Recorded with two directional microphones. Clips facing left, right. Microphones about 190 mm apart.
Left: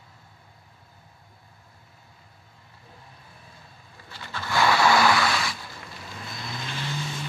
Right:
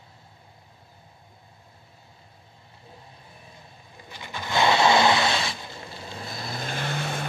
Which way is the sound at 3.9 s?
15° right (ahead or behind).